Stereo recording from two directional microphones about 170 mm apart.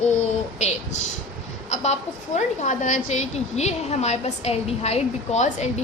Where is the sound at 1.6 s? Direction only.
40° left (ahead or behind).